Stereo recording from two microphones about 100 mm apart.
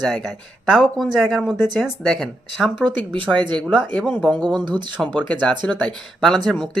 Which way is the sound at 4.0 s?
10° left (ahead or behind).